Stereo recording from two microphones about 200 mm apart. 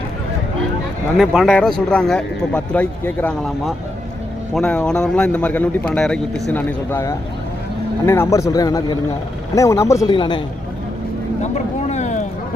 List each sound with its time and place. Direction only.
1.2 s speech: centre (ahead or behind); by 10.4 s 25° left (ahead or behind)
11.4 s vehicle: 35° left (ahead or behind)